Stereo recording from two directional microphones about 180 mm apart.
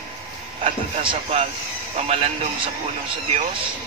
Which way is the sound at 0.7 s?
35° right (ahead or behind).